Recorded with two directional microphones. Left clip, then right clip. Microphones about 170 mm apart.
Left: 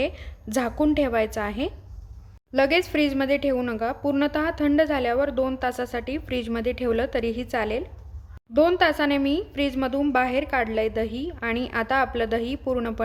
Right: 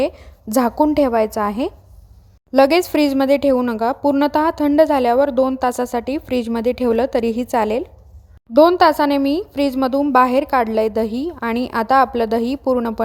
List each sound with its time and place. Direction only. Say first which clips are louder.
0.0 s a woman's voice: right 7 dB; 30° right (ahead or behind)